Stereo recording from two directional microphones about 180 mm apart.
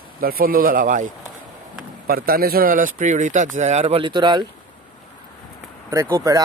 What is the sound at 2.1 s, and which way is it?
Speech, 55° right (ahead or behind).